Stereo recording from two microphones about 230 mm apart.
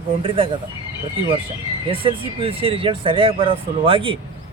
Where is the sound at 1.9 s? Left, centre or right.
Right.